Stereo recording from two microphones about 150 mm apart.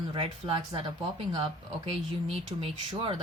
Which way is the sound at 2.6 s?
35° right (ahead or behind).